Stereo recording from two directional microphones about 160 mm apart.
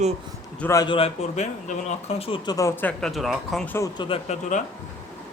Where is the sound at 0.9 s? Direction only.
35° left (ahead or behind).